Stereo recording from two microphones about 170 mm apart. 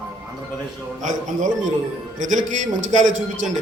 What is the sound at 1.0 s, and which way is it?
A man's voice, 45° right (ahead or behind).